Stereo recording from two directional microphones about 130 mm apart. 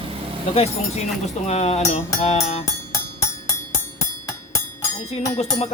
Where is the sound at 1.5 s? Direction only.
55° left (ahead or behind).